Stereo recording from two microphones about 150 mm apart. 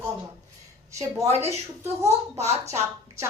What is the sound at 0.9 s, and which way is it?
A woman's voice, 20° right (ahead or behind).